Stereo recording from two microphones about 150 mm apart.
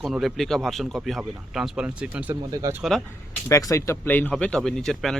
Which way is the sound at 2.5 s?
20° right (ahead or behind).